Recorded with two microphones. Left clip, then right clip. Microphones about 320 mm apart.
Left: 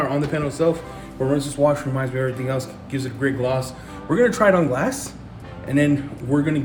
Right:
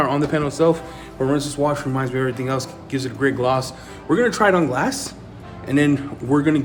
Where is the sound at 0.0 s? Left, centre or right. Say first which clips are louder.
Right 3 dB; centre.